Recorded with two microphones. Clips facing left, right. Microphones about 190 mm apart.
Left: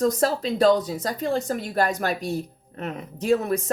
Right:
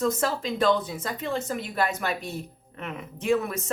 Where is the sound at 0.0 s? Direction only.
40° left (ahead or behind).